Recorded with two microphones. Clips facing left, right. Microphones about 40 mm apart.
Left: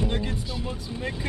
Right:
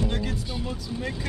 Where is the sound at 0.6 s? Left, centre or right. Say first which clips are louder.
Even; centre.